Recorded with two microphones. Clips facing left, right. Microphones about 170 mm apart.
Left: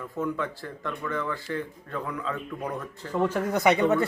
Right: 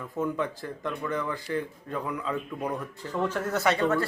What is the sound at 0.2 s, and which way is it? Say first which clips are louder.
Speech: right 1 dB; 20° right (ahead or behind).